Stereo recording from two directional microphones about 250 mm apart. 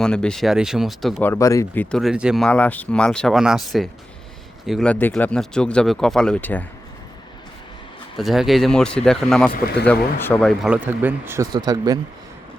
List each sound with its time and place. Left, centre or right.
0.0 s speech: centre
8.2 s speech: centre
9.5 s speech: left
9.8 s speech: centre